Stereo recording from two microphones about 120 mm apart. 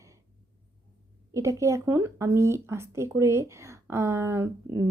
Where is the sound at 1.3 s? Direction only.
25° right (ahead or behind).